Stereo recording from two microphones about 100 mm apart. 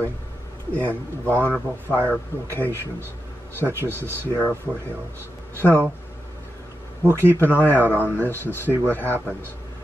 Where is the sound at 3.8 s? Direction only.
25° right (ahead or behind).